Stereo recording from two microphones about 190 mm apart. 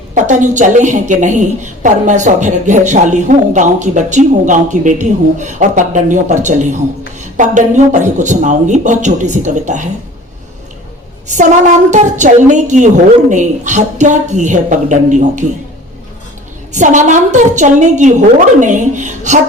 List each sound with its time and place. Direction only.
0.1 s a woman's voice: 40° right (ahead or behind)
11.9 s a woman's voice: 40° right (ahead or behind)
16.7 s a woman's voice: 40° right (ahead or behind)